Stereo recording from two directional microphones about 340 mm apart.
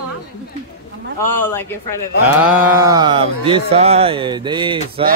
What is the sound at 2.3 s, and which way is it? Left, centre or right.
Speech, centre.